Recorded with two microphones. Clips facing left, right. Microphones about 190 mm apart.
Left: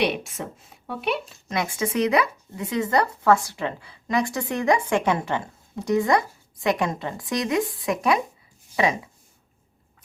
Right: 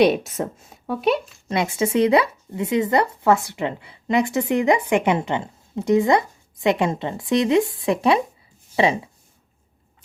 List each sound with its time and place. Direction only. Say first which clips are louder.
0.0 s speech: right 7 dB; 40° right (ahead or behind)
1.5 s a woman's voice: right 5 dB; 25° right (ahead or behind)